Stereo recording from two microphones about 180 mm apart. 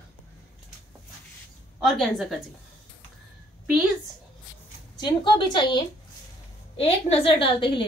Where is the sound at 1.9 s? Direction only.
Centre (ahead or behind).